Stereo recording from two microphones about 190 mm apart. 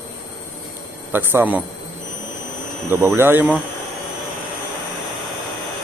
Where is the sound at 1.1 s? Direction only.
10° right (ahead or behind).